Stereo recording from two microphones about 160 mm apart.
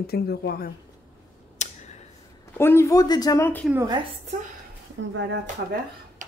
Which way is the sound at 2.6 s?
15° left (ahead or behind).